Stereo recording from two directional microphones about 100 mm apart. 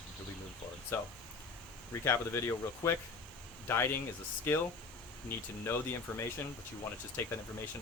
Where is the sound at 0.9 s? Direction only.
25° left (ahead or behind).